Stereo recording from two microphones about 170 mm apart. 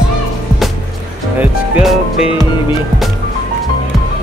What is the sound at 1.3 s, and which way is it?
Speech, 5° right (ahead or behind).